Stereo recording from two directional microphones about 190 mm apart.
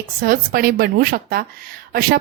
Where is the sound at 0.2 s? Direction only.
50° right (ahead or behind).